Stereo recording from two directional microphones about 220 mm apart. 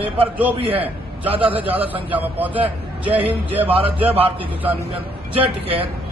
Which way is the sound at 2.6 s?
25° right (ahead or behind).